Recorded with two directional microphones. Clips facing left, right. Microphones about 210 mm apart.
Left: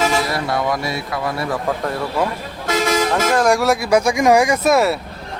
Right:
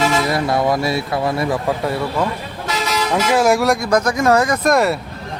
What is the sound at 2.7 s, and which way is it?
Vehicle, 50° left (ahead or behind).